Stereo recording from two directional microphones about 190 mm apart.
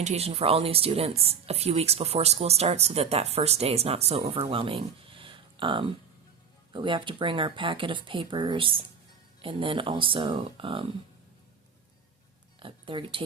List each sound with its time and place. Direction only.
0.0 s speech: 35° right (ahead or behind)
12.5 s speech: 25° right (ahead or behind)